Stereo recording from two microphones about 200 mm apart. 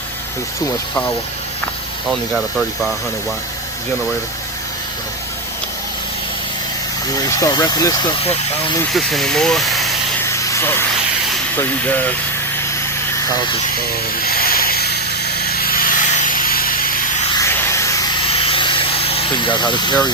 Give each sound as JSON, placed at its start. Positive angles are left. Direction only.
{"t": 2.3, "sound": "speech", "side_deg": 0}
{"t": 7.3, "sound": "speech", "side_deg": 15}
{"t": 8.2, "sound": "speech", "side_deg": 30}
{"t": 8.9, "sound": "speech", "side_deg": 0}
{"t": 10.2, "sound": "vehicle", "side_deg": 15}
{"t": 11.5, "sound": "speech", "side_deg": 10}
{"t": 13.1, "sound": "speech", "side_deg": 15}
{"t": 14.2, "sound": "a sound", "side_deg": 45}
{"t": 17.3, "sound": "a sound", "side_deg": 10}
{"t": 18.3, "sound": "a sound", "side_deg": 30}